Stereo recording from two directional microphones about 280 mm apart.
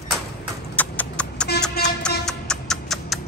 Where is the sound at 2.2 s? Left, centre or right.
Centre.